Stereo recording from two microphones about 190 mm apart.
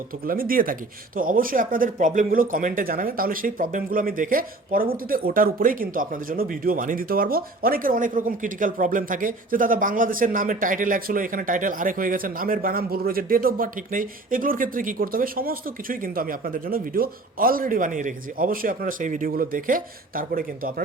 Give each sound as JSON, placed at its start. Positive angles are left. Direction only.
{"t": 0.3, "sound": "speech", "side_deg": -50}